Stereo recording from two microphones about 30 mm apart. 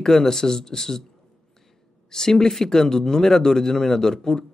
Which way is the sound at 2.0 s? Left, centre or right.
Centre.